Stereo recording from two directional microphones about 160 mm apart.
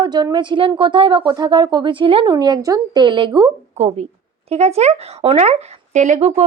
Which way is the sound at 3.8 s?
40° right (ahead or behind).